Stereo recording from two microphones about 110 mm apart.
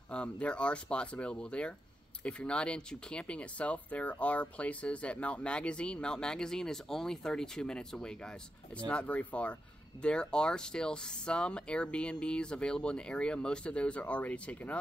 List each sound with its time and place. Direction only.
0.1 s speech: 10° left (ahead or behind)